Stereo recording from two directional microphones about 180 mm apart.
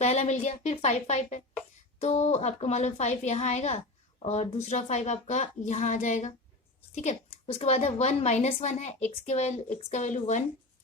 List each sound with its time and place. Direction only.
0.0 s a woman's voice: 40° left (ahead or behind)